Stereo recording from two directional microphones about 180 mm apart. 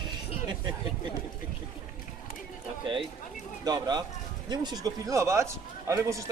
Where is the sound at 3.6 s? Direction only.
20° right (ahead or behind).